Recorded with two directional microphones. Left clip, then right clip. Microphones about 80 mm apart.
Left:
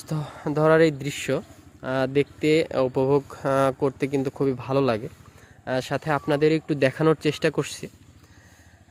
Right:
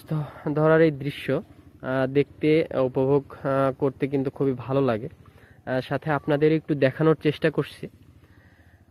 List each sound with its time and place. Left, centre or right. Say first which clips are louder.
0.1 s speech: even; left
5.6 s speech: left 1 dB; left